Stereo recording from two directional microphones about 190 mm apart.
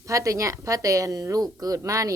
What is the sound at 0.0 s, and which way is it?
A woman's voice, 15° right (ahead or behind).